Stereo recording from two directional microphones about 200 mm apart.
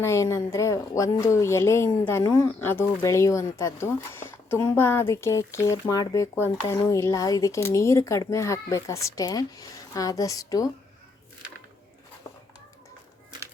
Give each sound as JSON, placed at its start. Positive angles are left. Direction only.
{"t": 0.0, "sound": "speech", "side_deg": 15}